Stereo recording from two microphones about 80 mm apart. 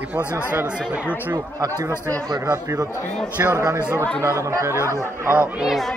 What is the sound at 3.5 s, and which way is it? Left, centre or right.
Speech, right.